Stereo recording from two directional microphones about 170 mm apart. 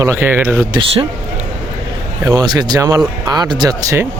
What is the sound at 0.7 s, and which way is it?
Speech, 30° right (ahead or behind).